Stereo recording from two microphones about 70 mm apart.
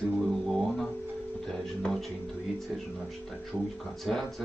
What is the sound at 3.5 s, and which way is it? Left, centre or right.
Speech, right.